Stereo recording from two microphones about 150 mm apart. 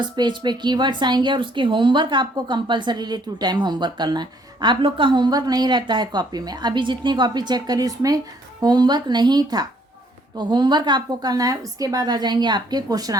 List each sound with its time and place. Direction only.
0.2 s speech: 30° right (ahead or behind)